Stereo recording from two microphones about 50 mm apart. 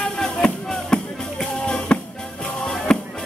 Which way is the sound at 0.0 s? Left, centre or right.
Centre.